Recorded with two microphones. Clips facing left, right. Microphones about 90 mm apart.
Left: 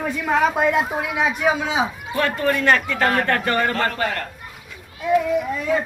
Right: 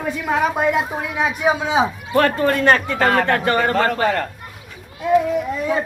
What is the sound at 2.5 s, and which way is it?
Speech, 35° right (ahead or behind).